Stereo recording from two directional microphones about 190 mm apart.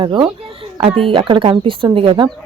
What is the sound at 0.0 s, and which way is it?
Speech, 25° right (ahead or behind).